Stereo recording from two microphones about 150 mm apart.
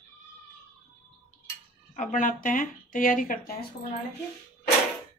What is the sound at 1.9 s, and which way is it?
Speech, 60° left (ahead or behind).